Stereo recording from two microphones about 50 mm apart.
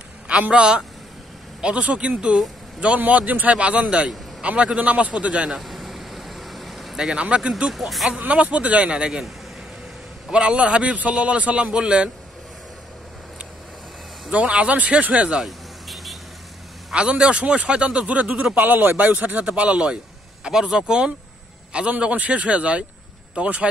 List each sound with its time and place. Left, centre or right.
0.5 s speech: centre
5.6 s vehicle: centre
7.2 s speech: right
7.7 s speech: centre
8.2 s speech: right
10.3 s speech: right
14.3 s speech: right
15.4 s vehicle: centre
16.9 s speech: right
18.6 s speech: right
20.4 s speech: centre
22.0 s speech: right